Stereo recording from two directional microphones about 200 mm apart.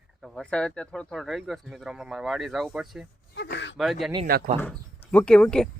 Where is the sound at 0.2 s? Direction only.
5° left (ahead or behind).